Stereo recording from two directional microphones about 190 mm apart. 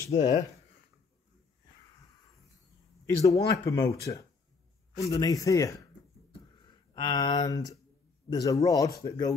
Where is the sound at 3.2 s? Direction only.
15° left (ahead or behind).